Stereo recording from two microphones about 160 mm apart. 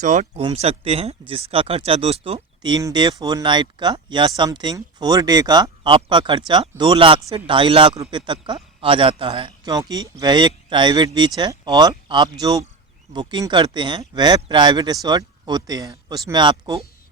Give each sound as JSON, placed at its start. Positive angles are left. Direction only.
{"t": 0.0, "sound": "speech", "side_deg": -50}
{"t": 0.4, "sound": "speech", "side_deg": -40}
{"t": 2.6, "sound": "speech", "side_deg": -25}